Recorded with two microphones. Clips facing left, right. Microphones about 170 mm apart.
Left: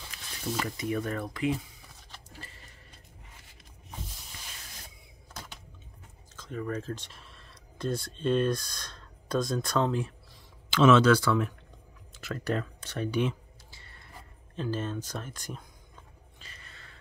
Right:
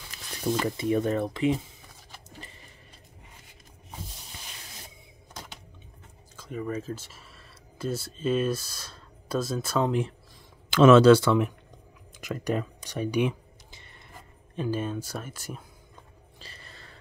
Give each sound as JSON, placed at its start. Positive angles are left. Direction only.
{"t": 0.7, "sound": "speech", "side_deg": -30}
{"t": 2.2, "sound": "a sound", "side_deg": -20}
{"t": 6.3, "sound": "speech", "side_deg": -10}
{"t": 9.8, "sound": "speech", "side_deg": -20}
{"t": 10.7, "sound": "speech", "side_deg": -50}
{"t": 11.0, "sound": "speech", "side_deg": -25}
{"t": 16.3, "sound": "a sound", "side_deg": -35}